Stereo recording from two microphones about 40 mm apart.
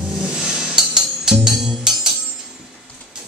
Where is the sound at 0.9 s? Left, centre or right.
Centre.